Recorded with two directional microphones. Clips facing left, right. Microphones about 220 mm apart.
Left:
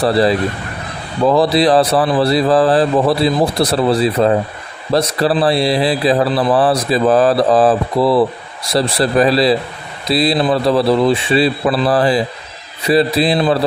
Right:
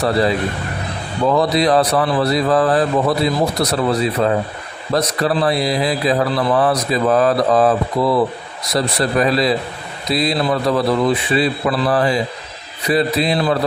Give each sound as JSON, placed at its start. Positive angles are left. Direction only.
{"t": 0.0, "sound": "a man's voice", "side_deg": 35}